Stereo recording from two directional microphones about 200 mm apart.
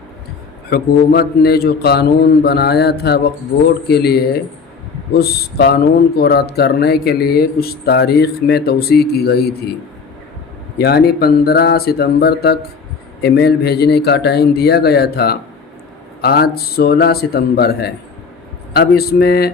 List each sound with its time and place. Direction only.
0.7 s speech: 50° left (ahead or behind)
10.8 s speech: 50° left (ahead or behind)